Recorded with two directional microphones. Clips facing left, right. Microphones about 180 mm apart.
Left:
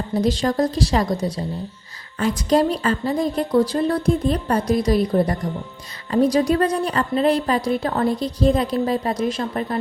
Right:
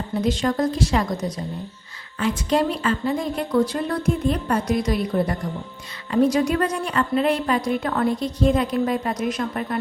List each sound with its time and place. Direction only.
0.1 s speech: 35° left (ahead or behind)